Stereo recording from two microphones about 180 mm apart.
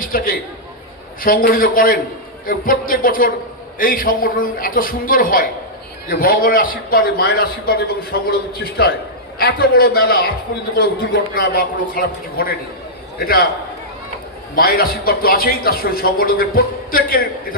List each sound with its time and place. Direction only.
0.0 s a man's voice: 55° left (ahead or behind)
11.3 s a man's voice: 55° left (ahead or behind)
14.5 s a man's voice: 55° left (ahead or behind)